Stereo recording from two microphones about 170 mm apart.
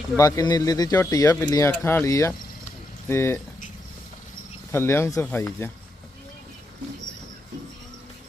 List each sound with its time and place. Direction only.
0.2 s speech: 20° left (ahead or behind)
4.7 s speech: 15° left (ahead or behind)